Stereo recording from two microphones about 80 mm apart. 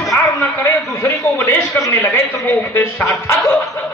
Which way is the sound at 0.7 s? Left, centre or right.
Left.